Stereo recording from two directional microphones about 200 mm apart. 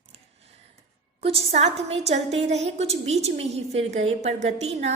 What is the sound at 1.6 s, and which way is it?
A woman's voice, 30° right (ahead or behind).